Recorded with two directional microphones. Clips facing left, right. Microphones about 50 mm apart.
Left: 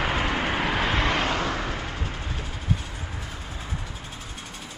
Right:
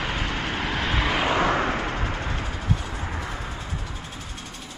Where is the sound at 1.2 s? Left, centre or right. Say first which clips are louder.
Right 5 dB; right.